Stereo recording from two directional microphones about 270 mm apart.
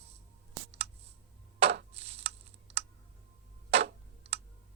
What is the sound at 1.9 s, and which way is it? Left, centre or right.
Typing, right.